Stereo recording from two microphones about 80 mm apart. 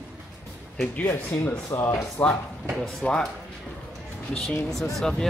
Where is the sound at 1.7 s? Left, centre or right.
Left.